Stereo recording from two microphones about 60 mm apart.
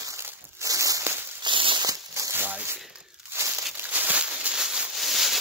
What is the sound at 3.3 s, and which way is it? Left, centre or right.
Crumpling, right.